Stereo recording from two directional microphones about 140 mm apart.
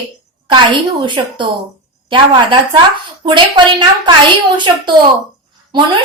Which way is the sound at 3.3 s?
35° right (ahead or behind).